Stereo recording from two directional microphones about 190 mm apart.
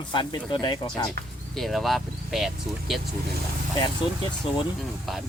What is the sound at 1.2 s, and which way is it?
Speech, 55° right (ahead or behind).